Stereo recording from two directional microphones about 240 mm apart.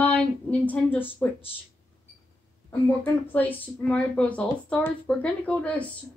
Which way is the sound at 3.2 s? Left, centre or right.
Centre.